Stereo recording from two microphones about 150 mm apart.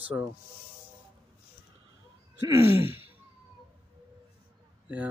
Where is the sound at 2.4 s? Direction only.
15° right (ahead or behind).